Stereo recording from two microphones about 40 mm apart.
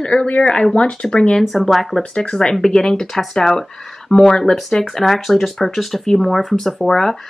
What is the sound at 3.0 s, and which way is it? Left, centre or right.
Speech, centre.